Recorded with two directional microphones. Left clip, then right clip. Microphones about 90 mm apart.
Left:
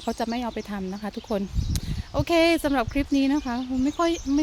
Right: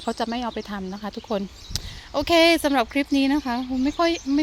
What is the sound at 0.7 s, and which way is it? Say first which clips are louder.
Speech: right 1 dB; 30° left (ahead or behind).